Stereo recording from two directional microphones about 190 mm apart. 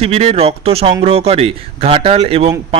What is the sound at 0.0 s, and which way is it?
Speech, 30° right (ahead or behind).